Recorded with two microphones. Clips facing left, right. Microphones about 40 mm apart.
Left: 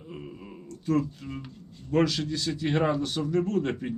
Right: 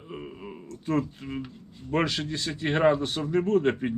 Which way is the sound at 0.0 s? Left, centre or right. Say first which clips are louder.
Right 2 dB; right.